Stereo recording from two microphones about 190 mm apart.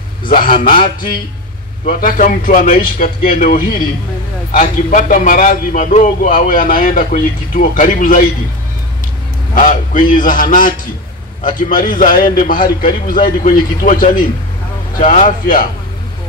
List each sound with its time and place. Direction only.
0.2 s a man's voice: 45° left (ahead or behind)
9.6 s a man's voice: 45° left (ahead or behind)